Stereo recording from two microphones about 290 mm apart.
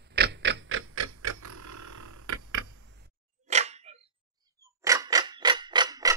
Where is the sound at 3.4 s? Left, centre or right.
Right.